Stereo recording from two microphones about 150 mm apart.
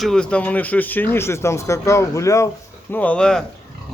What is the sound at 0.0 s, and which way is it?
Speech, 5° left (ahead or behind).